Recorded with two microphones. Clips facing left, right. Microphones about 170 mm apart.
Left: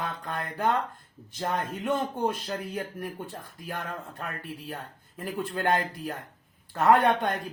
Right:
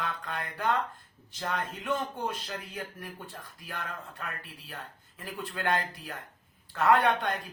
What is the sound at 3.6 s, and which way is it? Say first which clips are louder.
Speech: left 4 dB; 45° left (ahead or behind).